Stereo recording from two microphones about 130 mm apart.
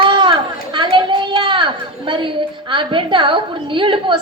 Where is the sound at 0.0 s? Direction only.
40° right (ahead or behind).